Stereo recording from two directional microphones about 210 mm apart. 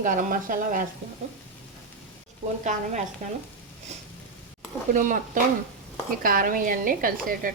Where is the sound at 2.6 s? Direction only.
35° right (ahead or behind).